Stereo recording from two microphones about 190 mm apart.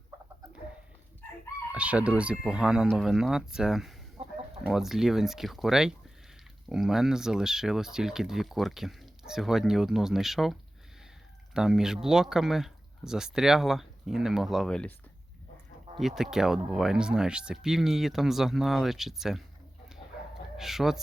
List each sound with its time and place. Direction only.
1.7 s speech: 5° right (ahead or behind)
4.2 s chicken: 35° right (ahead or behind)
4.7 s speech: centre (ahead or behind)
16.0 s speech: centre (ahead or behind)
20.6 s speech: centre (ahead or behind)